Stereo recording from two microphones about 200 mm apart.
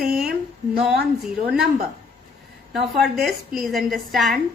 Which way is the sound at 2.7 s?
Centre (ahead or behind).